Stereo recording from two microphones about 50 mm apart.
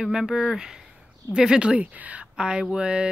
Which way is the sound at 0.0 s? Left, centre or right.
Centre.